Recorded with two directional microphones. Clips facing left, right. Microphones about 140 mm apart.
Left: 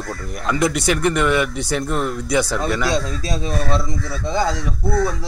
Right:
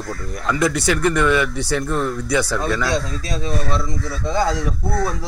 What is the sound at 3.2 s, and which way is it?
Speech, 30° left (ahead or behind).